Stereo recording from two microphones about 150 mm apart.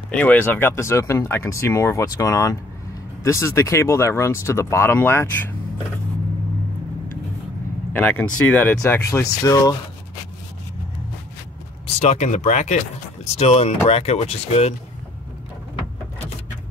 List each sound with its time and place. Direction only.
0.1 s speech: 10° left (ahead or behind)
7.9 s speech: 10° left (ahead or behind)
12.0 s speech: 50° left (ahead or behind)